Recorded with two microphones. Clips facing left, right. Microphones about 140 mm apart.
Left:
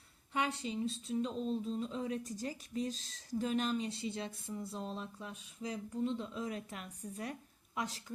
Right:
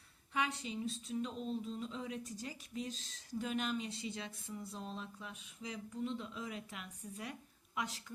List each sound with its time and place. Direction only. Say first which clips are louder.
0.3 s speech: left 3 dB; 30° left (ahead or behind)